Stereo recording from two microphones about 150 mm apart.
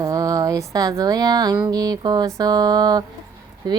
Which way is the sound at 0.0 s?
25° right (ahead or behind).